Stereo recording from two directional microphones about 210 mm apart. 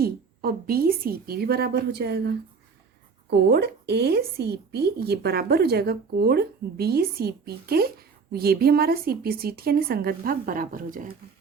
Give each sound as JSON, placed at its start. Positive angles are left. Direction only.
{"t": 0.0, "sound": "a woman's voice", "side_deg": -45}